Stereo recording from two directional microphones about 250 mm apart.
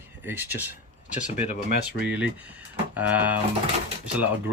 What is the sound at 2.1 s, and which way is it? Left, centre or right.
Speech, centre.